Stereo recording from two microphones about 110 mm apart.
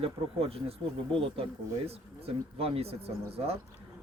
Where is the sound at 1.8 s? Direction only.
65° right (ahead or behind).